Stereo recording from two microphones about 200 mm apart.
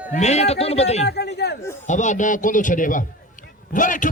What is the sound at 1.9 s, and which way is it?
A man's voice, 40° left (ahead or behind).